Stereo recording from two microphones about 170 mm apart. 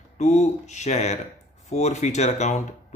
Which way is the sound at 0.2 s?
40° left (ahead or behind).